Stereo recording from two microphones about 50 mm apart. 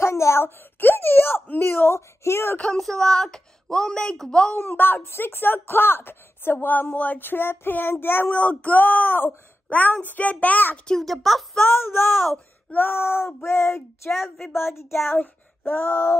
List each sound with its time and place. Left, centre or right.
0.0 s a sound: left
0.4 s a sound: left
2.0 s speech: left
2.8 s a woman's voice: centre
4.6 s speech: left
8.3 s speech: left
10.9 s speech: centre
11.6 s speech: left
14.8 s child singing: left
15.6 s speech: left